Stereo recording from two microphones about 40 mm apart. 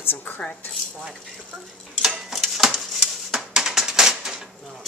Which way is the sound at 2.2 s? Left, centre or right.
Centre.